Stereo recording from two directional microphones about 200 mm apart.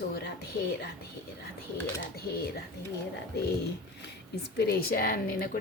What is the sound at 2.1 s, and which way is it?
Speech, 50° left (ahead or behind).